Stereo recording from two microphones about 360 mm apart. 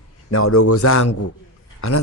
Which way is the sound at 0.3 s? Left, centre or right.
Left.